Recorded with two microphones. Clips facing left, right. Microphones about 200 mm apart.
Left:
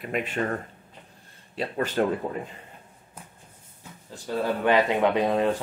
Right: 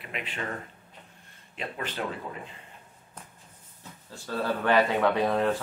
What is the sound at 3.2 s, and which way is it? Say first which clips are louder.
Shuffle: left 1 dB; 10° left (ahead or behind).